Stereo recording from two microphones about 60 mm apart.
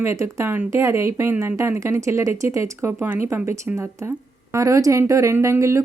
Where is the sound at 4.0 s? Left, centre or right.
Right.